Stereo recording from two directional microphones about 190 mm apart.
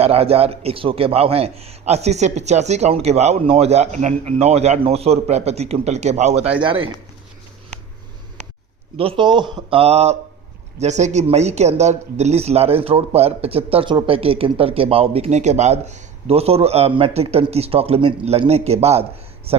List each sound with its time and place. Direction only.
0.0 s speech: 30° right (ahead or behind)
9.0 s speech: 25° right (ahead or behind)